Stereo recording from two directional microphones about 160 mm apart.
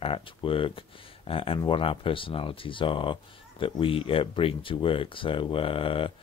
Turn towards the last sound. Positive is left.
turn(degrees=35)  # may be behind; listen again after turning